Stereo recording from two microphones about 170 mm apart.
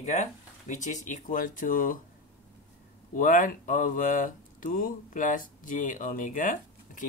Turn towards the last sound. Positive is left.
turn(degrees=50)  # may be behind; listen again after turning